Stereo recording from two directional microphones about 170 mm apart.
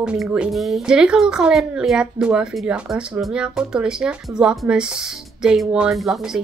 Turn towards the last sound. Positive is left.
turn(degrees=0)  # may be behind; listen again after turning